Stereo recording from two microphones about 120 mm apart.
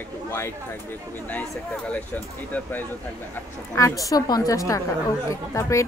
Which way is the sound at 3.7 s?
25° left (ahead or behind).